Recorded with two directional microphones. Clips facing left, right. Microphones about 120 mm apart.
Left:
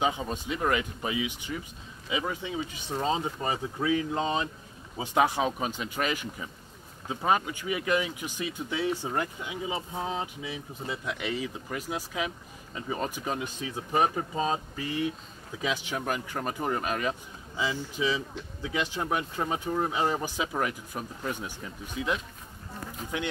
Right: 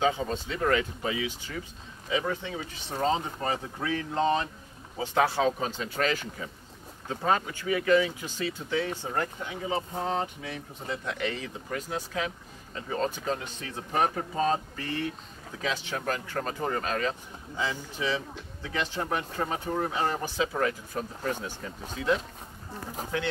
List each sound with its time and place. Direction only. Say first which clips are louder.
0.0 s speech: right 2 dB; 15° left (ahead or behind)